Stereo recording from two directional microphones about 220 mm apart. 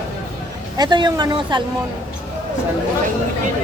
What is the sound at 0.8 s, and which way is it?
Speech, 20° right (ahead or behind).